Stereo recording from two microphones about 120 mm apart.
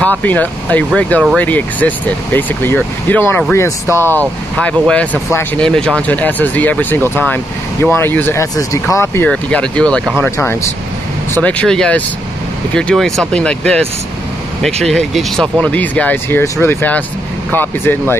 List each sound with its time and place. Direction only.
0.0 s speech: 15° left (ahead or behind)
4.6 s speech: 10° left (ahead or behind)
9.3 s speech: 10° left (ahead or behind)
10.3 s speech: 20° left (ahead or behind)